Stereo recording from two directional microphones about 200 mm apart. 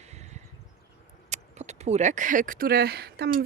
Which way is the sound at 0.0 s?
35° right (ahead or behind).